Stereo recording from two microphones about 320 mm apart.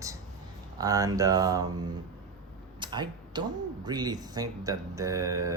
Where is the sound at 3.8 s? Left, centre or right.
Centre.